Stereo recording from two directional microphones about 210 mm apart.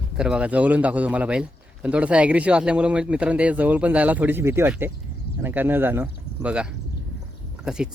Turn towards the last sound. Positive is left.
turn(degrees=-5)  # may be behind; listen again after turning